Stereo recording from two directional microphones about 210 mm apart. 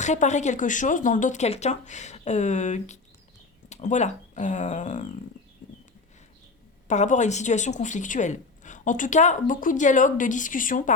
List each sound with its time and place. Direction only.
0.0 s speech: 35° left (ahead or behind)
6.8 s speech: 35° left (ahead or behind)